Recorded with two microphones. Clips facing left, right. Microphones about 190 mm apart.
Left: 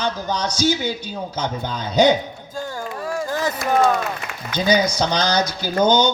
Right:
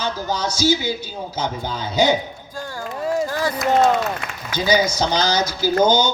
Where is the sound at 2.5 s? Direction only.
20° left (ahead or behind).